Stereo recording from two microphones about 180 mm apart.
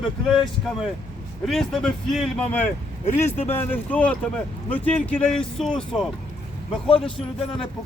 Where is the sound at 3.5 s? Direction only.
10° left (ahead or behind).